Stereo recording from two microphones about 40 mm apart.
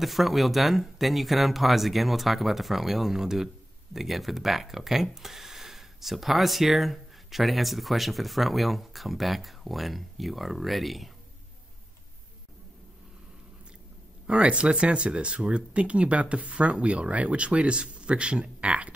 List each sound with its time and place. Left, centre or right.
0.0 s speech: centre
14.2 s speech: right